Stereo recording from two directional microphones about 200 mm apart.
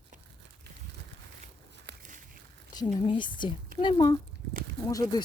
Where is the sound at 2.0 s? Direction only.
40° right (ahead or behind).